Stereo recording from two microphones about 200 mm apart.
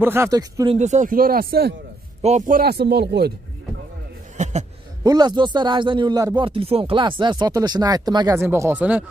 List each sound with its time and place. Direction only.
0.0 s speech: 10° right (ahead or behind)
0.7 s speech: 35° right (ahead or behind)
2.2 s speech: 40° right (ahead or behind); by 3.3 s 55° right (ahead or behind)
4.4 s a sound: 35° right (ahead or behind)
5.0 s speech: 20° right (ahead or behind)